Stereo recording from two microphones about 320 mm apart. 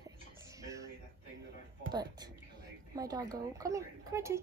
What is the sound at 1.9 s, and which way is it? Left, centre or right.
Speech, centre.